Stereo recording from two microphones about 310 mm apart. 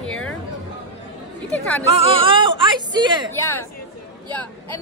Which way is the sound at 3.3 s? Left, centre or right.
Centre.